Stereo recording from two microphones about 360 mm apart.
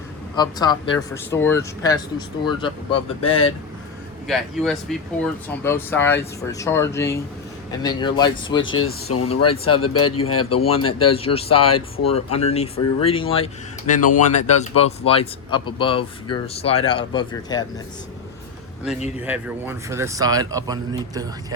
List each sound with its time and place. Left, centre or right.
0.3 s speech: centre
3.2 s speech: left
4.3 s speech: centre
8.6 s speech: left
10.6 s speech: centre
19.2 s speech: centre